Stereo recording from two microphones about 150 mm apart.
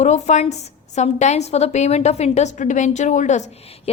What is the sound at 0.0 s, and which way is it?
A woman's voice, 50° left (ahead or behind).